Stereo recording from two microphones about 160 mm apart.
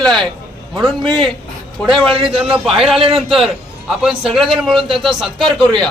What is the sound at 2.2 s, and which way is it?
Speech, 35° right (ahead or behind).